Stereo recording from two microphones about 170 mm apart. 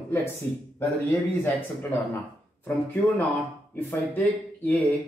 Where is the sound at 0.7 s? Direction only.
15° left (ahead or behind).